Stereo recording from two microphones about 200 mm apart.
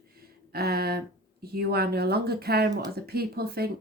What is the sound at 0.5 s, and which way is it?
Speech, 50° right (ahead or behind).